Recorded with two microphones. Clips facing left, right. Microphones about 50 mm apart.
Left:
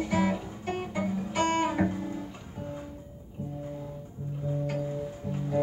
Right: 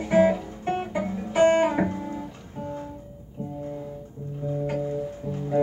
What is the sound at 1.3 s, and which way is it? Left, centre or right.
Guitar, right.